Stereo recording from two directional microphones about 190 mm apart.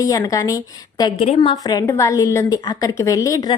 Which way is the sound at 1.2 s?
30° left (ahead or behind).